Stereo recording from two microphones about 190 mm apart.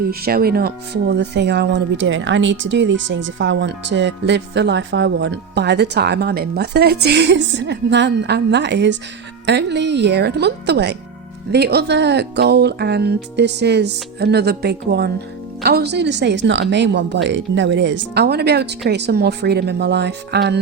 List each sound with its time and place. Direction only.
0.1 s speech: 50° right (ahead or behind)